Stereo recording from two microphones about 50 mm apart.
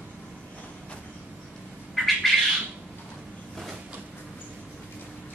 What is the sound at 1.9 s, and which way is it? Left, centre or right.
Bird, centre.